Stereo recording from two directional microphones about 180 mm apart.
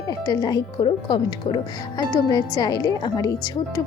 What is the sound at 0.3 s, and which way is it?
Speech, 20° left (ahead or behind).